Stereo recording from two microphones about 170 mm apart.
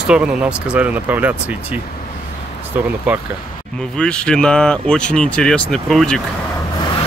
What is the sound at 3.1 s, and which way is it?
Speech, 10° right (ahead or behind).